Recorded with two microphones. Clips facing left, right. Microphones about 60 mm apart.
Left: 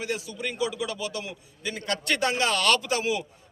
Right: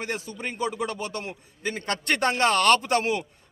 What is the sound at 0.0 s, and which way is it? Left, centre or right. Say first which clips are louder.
A man's voice: even; right.